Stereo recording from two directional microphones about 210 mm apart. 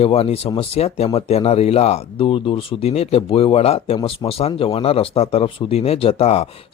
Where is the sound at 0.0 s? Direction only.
30° left (ahead or behind).